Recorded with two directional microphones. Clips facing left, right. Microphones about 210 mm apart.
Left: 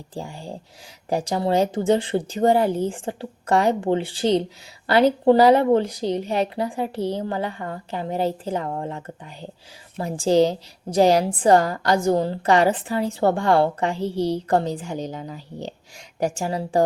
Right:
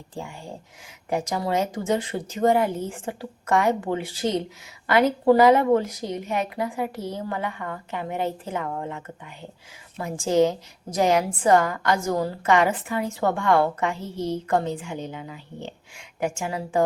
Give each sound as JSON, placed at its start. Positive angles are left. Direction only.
{"t": 0.1, "sound": "a woman's voice", "side_deg": 35}